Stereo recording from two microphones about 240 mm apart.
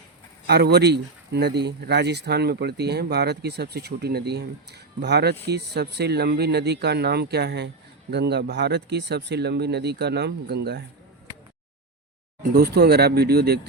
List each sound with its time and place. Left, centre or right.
0.4 s speech: right
12.5 s speech: right